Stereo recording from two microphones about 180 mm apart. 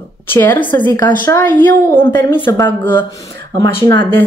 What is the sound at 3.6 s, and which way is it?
Speech, 20° left (ahead or behind).